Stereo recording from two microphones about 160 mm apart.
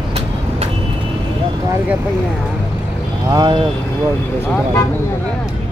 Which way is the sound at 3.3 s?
30° right (ahead or behind).